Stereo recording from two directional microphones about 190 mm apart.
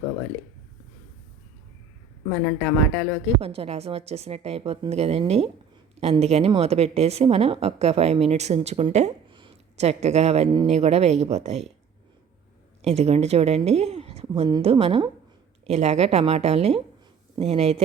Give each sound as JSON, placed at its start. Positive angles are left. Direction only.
{"t": 2.3, "sound": "speech", "side_deg": 10}
{"t": 3.4, "sound": "a woman's voice", "side_deg": -30}
{"t": 12.8, "sound": "a woman's voice", "side_deg": -35}